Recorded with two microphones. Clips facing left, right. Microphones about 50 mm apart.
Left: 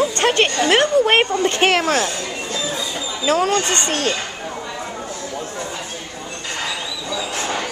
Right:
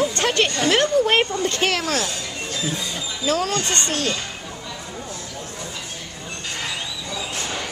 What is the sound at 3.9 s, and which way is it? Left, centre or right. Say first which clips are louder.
Speech: left 3 dB; left.